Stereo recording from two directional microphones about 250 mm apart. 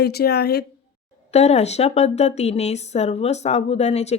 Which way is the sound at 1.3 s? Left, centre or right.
Left.